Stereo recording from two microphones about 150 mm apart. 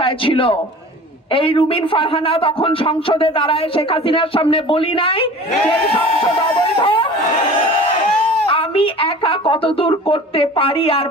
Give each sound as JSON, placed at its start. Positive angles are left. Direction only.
{"t": 0.0, "sound": "a man's voice", "side_deg": 35}
{"t": 6.6, "sound": "a sound", "side_deg": 35}
{"t": 8.4, "sound": "speech", "side_deg": 35}